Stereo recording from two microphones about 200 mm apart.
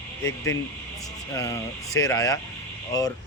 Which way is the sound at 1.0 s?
15° left (ahead or behind).